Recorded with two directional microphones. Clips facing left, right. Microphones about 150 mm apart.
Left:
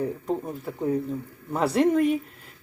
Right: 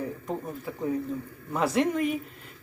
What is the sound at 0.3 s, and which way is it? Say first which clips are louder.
Speech: left 4 dB; centre (ahead or behind).